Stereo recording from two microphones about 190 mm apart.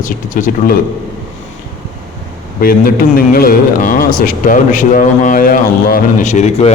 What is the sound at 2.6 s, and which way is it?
A man's voice, 50° left (ahead or behind).